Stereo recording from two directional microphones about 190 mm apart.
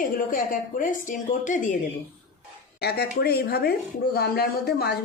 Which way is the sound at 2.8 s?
55° left (ahead or behind).